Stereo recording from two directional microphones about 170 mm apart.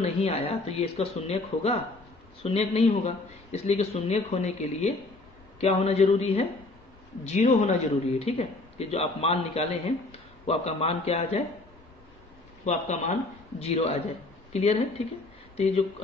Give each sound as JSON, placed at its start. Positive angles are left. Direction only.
{"t": 0.0, "sound": "speech", "side_deg": 35}
{"t": 12.6, "sound": "speech", "side_deg": 45}